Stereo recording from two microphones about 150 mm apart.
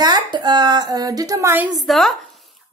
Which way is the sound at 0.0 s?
30° right (ahead or behind).